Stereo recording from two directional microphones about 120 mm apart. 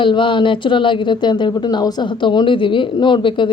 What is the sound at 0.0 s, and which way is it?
Speech, 45° left (ahead or behind).